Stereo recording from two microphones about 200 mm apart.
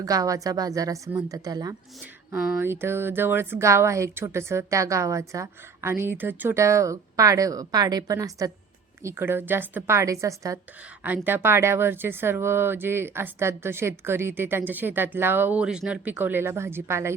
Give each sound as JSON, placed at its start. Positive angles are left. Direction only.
{"t": 0.0, "sound": "speech", "side_deg": -15}